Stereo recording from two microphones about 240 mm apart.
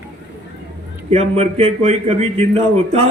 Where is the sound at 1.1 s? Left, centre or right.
Right.